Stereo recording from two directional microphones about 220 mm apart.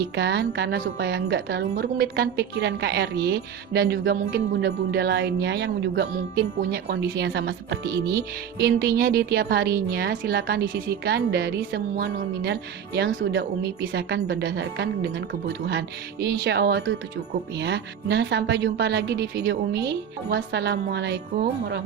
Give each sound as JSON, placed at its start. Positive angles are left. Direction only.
{"t": 0.0, "sound": "a woman's voice", "side_deg": -50}